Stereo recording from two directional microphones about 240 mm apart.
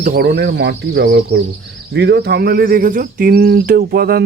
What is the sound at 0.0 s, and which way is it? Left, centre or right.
Speech, right.